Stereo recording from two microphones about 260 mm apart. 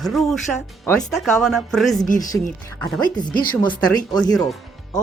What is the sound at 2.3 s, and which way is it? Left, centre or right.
Speech, centre.